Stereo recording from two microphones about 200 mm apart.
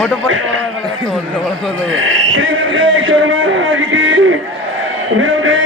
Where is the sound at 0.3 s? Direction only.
75° right (ahead or behind).